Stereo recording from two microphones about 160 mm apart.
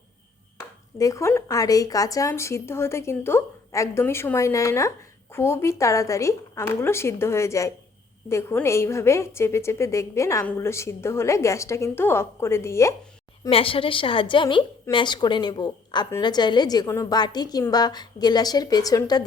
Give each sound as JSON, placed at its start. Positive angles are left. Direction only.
{"t": 0.9, "sound": "a woman's voice", "side_deg": 20}
{"t": 13.5, "sound": "a woman's voice", "side_deg": 35}